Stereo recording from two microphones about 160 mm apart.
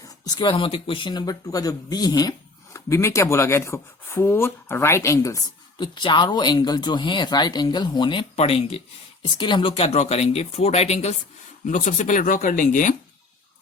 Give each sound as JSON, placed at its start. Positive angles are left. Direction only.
{"t": 0.3, "sound": "speech", "side_deg": 30}
{"t": 5.7, "sound": "speech", "side_deg": 30}
{"t": 11.6, "sound": "speech", "side_deg": 50}